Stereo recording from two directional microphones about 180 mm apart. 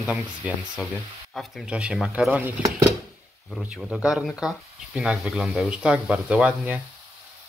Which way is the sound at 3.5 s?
Centre (ahead or behind).